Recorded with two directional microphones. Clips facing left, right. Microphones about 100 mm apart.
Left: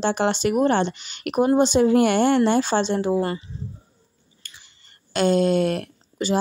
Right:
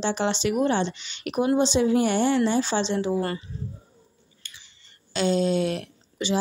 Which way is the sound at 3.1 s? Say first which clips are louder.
Left 3 dB; 20° left (ahead or behind).